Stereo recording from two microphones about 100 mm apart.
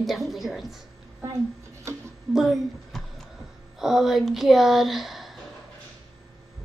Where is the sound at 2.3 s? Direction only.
Centre (ahead or behind).